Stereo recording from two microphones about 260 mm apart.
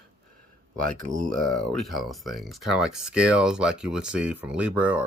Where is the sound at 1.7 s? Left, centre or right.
Centre.